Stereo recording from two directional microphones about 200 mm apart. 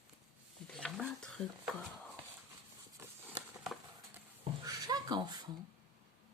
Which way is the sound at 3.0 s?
15° right (ahead or behind).